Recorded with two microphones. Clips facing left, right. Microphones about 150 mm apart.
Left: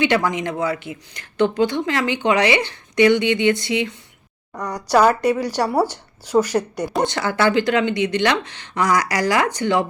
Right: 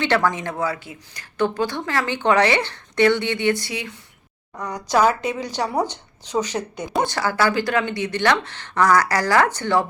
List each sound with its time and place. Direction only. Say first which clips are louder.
0.0 s speech: left 2 dB; 15° left (ahead or behind)
4.5 s speech: left 3 dB; 10° left (ahead or behind)
7.1 s speech: left 2 dB; 25° left (ahead or behind)